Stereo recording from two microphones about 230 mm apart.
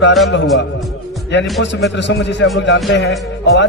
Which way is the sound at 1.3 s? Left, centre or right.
Left.